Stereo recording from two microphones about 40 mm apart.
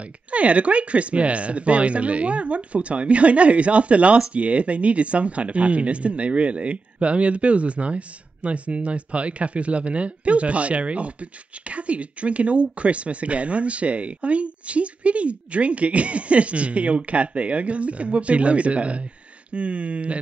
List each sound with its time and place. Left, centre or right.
0.0 s speech: right